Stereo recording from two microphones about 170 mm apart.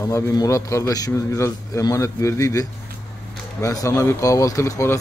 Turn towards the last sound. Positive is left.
turn(degrees=15)  # may be behind; listen again after turning